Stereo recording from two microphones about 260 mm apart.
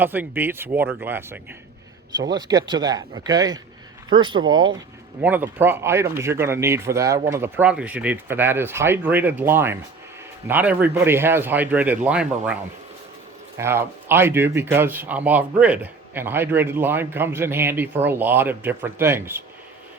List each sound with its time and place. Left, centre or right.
0.0 s speech: centre
13.6 s speech: centre